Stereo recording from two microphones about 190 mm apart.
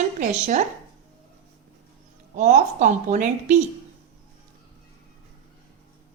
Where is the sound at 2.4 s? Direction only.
40° right (ahead or behind).